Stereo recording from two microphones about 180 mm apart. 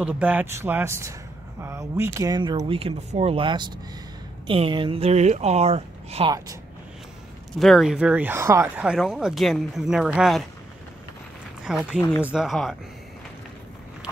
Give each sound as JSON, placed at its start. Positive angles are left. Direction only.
{"t": 0.0, "sound": "speech", "side_deg": -5}
{"t": 6.3, "sound": "speech", "side_deg": -20}
{"t": 7.5, "sound": "speech", "side_deg": 0}
{"t": 11.6, "sound": "speech", "side_deg": -5}